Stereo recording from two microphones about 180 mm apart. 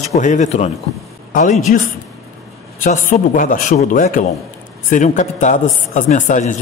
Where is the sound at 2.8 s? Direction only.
45° left (ahead or behind).